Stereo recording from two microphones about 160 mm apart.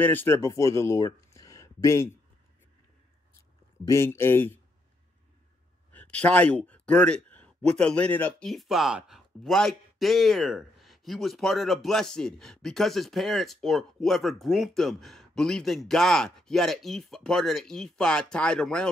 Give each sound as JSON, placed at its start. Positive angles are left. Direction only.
{"t": 0.0, "sound": "speech", "side_deg": 10}
{"t": 3.8, "sound": "speech", "side_deg": 15}
{"t": 5.9, "sound": "a sound", "side_deg": 10}
{"t": 7.7, "sound": "speech", "side_deg": 5}